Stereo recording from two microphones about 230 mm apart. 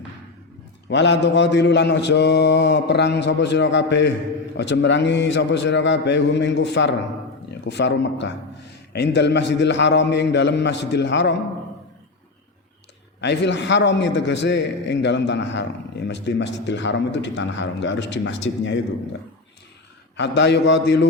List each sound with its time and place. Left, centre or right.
0.9 s mantra: left
13.2 s mantra: left
20.1 s mantra: left